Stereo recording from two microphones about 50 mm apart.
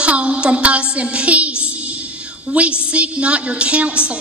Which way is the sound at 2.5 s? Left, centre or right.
Right.